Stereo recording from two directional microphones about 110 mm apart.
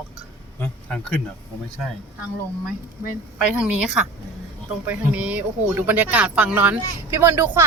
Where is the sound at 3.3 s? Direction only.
10° right (ahead or behind).